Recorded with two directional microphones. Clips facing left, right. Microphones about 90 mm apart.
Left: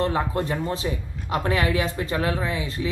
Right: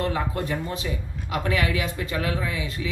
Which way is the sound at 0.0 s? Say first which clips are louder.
Left 3 dB; 30° left (ahead or behind).